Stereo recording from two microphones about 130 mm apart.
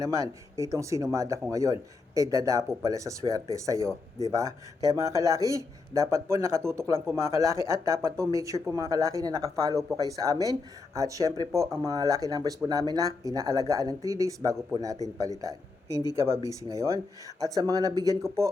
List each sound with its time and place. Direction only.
0.0 s speech: 25° right (ahead or behind)